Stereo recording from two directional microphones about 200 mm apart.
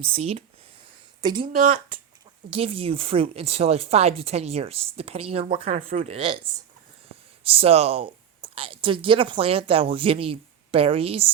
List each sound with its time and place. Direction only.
0.0 s speech: 30° right (ahead or behind)
2.5 s speech: 30° right (ahead or behind)
7.4 s speech: 30° right (ahead or behind)